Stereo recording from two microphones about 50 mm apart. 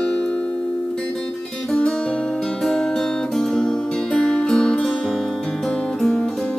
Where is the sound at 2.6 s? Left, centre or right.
Centre.